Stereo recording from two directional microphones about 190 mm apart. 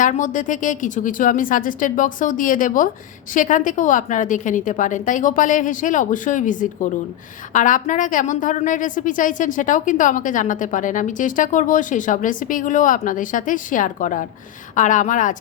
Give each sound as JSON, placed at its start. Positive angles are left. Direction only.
{"t": 0.0, "sound": "a woman's voice", "side_deg": 40}